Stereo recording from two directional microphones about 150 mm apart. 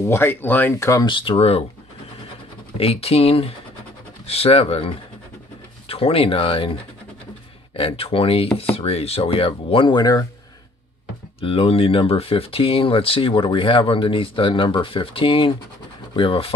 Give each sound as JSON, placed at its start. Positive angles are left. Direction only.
{"t": 0.0, "sound": "speech", "side_deg": 15}
{"t": 1.0, "sound": "speech", "side_deg": 35}
{"t": 2.8, "sound": "speech", "side_deg": 40}
{"t": 7.7, "sound": "speech", "side_deg": 40}
{"t": 11.4, "sound": "speech", "side_deg": 40}